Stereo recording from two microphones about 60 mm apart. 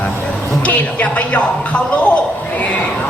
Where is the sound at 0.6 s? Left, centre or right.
Left.